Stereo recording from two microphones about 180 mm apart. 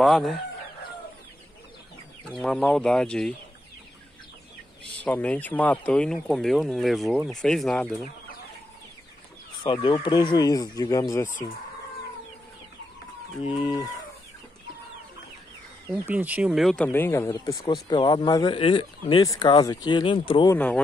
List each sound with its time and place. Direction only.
0.0 s speech: centre (ahead or behind)
2.4 s speech: 5° left (ahead or behind)
5.0 s speech: 10° left (ahead or behind)
9.6 s speech: 25° left (ahead or behind)
13.6 s speech: 20° left (ahead or behind)
16.1 s speech: 10° right (ahead or behind); by 20.5 s 25° left (ahead or behind)
20.5 s speech: 10° left (ahead or behind)